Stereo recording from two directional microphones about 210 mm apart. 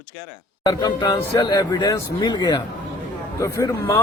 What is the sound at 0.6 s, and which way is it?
A man's voice, 20° left (ahead or behind).